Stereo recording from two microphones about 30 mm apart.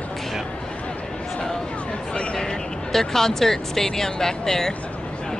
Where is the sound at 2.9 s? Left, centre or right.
Centre.